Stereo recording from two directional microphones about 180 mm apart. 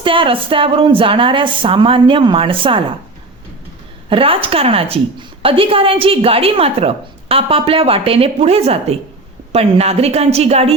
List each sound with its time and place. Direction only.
0.0 s a woman's voice: 30° right (ahead or behind)
4.1 s a woman's voice: 30° right (ahead or behind)